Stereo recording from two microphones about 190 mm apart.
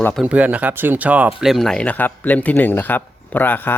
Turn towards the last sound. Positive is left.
turn(degrees=10)  # may be behind; listen again after turning